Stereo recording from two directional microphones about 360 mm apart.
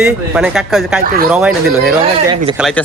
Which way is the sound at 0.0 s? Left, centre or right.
Centre.